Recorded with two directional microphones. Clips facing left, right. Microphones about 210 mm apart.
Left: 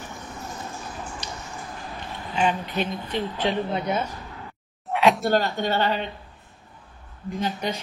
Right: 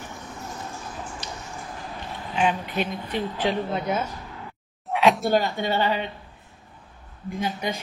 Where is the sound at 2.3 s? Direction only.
5° right (ahead or behind).